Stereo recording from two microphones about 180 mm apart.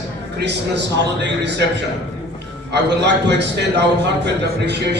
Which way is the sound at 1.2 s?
70° right (ahead or behind).